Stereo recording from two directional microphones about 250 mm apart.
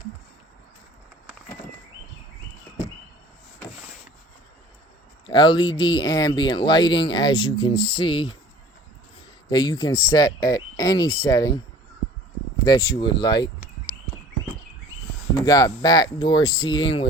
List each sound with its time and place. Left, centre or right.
5.2 s speech: centre
9.5 s speech: centre
12.6 s speech: centre
15.4 s speech: centre